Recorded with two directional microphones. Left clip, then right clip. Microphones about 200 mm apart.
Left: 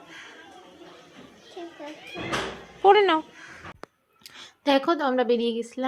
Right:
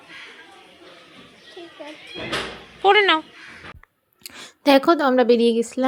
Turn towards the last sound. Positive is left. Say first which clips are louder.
# right 8 dB
turn(degrees=-35)  # may be behind; listen again after turning